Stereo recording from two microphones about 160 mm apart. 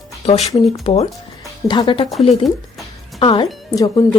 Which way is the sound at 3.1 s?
35° left (ahead or behind).